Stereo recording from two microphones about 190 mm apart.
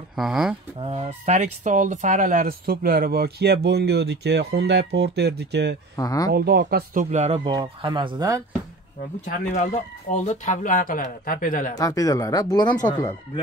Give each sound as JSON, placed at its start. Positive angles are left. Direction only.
{"t": 0.1, "sound": "speech", "side_deg": 0}
{"t": 0.7, "sound": "speech", "side_deg": -30}
{"t": 5.9, "sound": "speech", "side_deg": 20}
{"t": 6.3, "sound": "speech", "side_deg": -60}
{"t": 7.4, "sound": "speech", "side_deg": -25}
{"t": 9.2, "sound": "speech", "side_deg": 40}
{"t": 11.7, "sound": "speech", "side_deg": 20}